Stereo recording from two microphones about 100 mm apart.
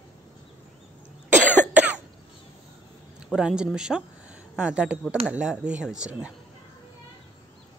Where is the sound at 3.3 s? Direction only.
10° right (ahead or behind).